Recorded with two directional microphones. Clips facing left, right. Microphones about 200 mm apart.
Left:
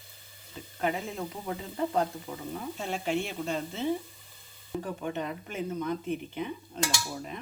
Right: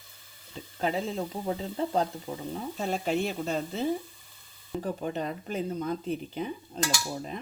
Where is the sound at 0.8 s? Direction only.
30° right (ahead or behind).